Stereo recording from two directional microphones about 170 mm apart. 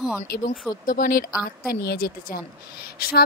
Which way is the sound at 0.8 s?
55° left (ahead or behind).